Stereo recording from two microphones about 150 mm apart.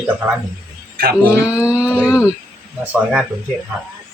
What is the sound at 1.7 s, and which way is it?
Speech, 5° right (ahead or behind).